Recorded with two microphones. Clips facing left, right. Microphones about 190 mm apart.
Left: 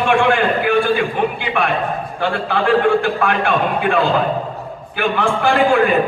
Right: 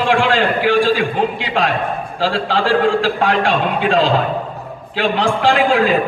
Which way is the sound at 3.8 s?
90° right.